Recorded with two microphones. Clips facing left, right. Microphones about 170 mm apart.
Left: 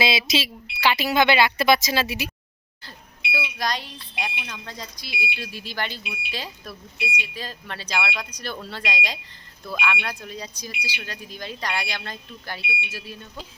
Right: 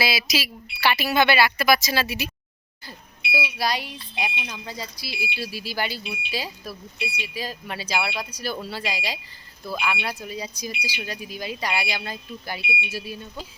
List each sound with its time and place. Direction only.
0.0 s speech: 25° left (ahead or behind)
3.3 s speech: 10° right (ahead or behind)